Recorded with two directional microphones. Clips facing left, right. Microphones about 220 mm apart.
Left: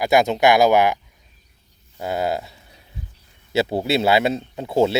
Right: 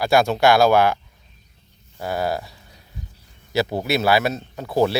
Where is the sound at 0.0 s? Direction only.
20° left (ahead or behind).